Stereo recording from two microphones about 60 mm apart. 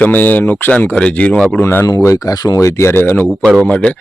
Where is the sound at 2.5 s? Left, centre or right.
Left.